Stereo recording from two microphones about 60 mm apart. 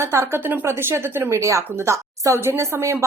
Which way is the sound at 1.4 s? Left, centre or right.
Right.